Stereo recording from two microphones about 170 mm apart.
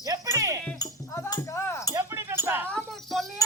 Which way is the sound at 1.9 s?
15° right (ahead or behind).